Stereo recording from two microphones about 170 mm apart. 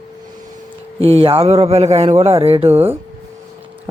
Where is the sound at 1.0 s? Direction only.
35° right (ahead or behind).